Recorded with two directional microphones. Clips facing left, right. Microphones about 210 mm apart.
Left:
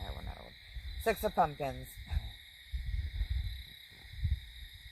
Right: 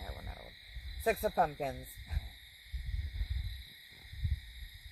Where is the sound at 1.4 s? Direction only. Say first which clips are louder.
Even; 15° right (ahead or behind).